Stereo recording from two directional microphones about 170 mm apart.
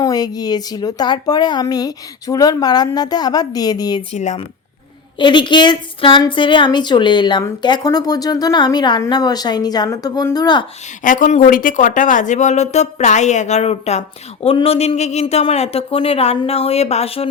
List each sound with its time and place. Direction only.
0.0 s a woman's voice: 20° left (ahead or behind)
4.1 s speech: 40° left (ahead or behind)
5.2 s a woman's voice: 25° left (ahead or behind)
11.0 s speech: 50° left (ahead or behind)